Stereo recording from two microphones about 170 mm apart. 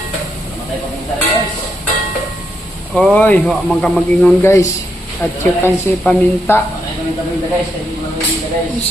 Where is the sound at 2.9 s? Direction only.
5° left (ahead or behind).